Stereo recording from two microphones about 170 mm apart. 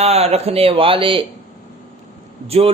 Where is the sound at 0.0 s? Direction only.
35° right (ahead or behind).